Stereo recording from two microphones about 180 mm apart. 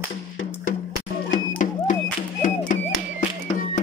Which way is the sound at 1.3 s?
45° left (ahead or behind).